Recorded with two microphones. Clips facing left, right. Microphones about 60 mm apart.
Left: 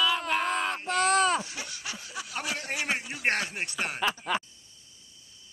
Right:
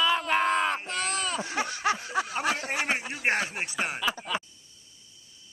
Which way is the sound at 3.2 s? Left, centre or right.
Centre.